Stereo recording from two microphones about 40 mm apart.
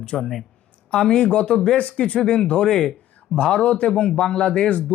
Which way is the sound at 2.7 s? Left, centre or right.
Centre.